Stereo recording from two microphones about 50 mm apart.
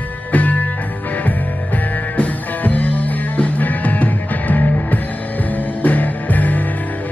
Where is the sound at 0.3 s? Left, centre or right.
Left.